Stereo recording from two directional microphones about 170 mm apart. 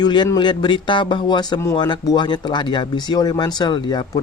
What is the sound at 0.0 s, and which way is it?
Speech, 25° left (ahead or behind).